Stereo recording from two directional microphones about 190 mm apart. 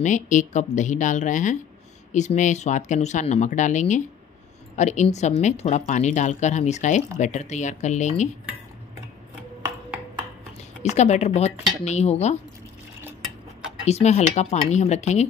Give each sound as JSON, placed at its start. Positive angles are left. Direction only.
{"t": 0.0, "sound": "a woman's voice", "side_deg": 40}
{"t": 10.8, "sound": "a woman's voice", "side_deg": 35}
{"t": 13.8, "sound": "a woman's voice", "side_deg": 35}